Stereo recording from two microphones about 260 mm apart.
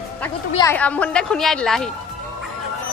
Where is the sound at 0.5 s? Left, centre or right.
Centre.